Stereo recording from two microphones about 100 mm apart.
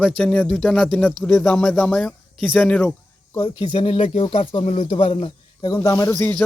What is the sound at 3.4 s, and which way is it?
Speech, 55° left (ahead or behind).